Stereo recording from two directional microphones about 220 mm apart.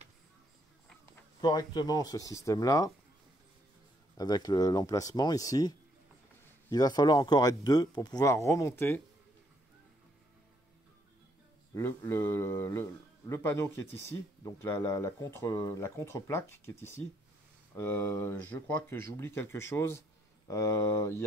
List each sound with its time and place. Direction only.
1.4 s speech: 20° left (ahead or behind)
4.2 s speech: 15° left (ahead or behind)
11.7 s speech: 10° left (ahead or behind)